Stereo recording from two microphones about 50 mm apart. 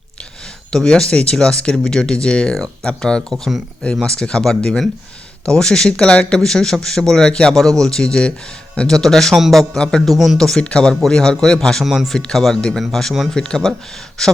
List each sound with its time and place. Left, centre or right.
0.7 s speech: centre
3.3 s speech: centre
4.0 s speech: centre
9.7 s speech: centre
10.1 s speech: centre
10.6 s speech: left
11.9 s speech: centre
12.1 s speech: centre